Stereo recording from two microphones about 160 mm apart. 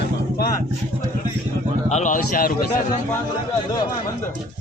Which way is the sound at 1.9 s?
50° left (ahead or behind).